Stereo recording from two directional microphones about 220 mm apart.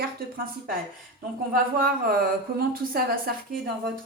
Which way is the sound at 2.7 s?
40° right (ahead or behind).